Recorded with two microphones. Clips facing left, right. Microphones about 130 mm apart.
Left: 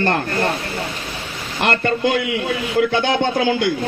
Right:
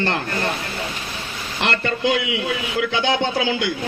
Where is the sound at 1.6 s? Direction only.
50° left (ahead or behind).